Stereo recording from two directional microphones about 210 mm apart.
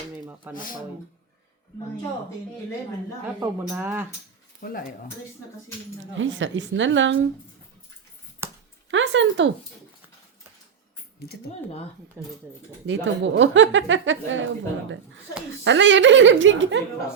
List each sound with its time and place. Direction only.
0.5 s speech: 40° left (ahead or behind)
3.4 s speech: 10° right (ahead or behind)
4.6 s speech: 40° left (ahead or behind)
6.1 s speech: 65° right (ahead or behind)
8.4 s a sound: 10° right (ahead or behind)
8.9 s speech: 65° right (ahead or behind)
12.2 s speech: 10° right (ahead or behind)
12.8 s speech: 60° right (ahead or behind)